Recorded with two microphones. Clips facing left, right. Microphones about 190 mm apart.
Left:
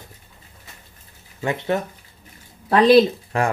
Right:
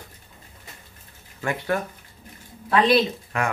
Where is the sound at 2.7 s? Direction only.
40° left (ahead or behind).